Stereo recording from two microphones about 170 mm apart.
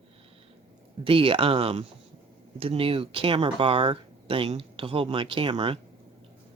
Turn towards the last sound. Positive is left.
turn(degrees=-30)  # may be behind; listen again after turning